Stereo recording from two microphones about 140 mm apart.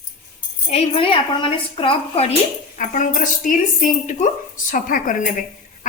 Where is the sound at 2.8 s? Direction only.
65° left (ahead or behind).